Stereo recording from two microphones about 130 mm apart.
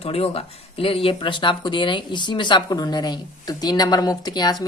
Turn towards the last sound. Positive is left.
turn(degrees=30)  # may be behind; listen again after turning